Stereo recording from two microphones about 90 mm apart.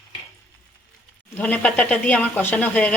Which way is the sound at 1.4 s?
15° left (ahead or behind).